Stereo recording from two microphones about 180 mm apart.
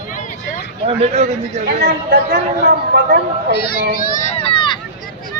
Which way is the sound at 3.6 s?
60° left (ahead or behind).